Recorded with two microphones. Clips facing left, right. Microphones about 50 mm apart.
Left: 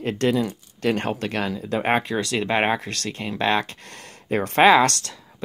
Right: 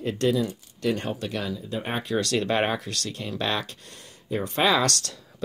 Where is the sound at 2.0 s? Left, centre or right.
Left.